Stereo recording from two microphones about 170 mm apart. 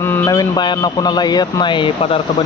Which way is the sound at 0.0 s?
15° left (ahead or behind).